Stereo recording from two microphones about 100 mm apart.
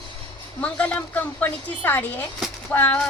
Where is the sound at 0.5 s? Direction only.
10° left (ahead or behind).